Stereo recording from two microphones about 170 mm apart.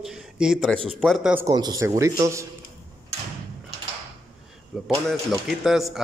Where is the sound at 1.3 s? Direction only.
20° right (ahead or behind).